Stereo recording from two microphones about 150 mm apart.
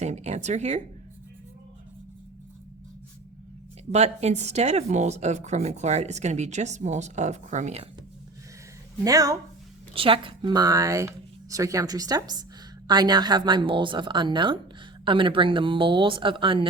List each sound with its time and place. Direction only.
0.0 s speech: 50° right (ahead or behind)
3.9 s speech: 45° right (ahead or behind)
9.0 s speech: 25° right (ahead or behind)
9.9 s a woman's voice: 35° right (ahead or behind)